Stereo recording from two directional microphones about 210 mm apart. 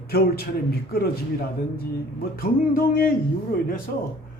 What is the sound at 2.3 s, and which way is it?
Speech, 45° left (ahead or behind).